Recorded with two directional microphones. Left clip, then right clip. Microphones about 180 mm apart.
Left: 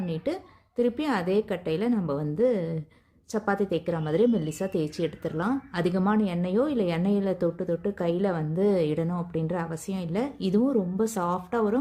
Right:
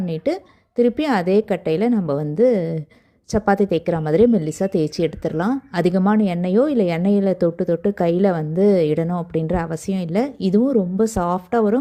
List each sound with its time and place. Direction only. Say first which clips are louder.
0.0 s a woman's voice: right 8 dB; 35° right (ahead or behind)